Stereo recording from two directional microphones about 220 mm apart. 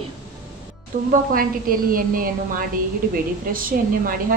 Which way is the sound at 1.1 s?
40° right (ahead or behind).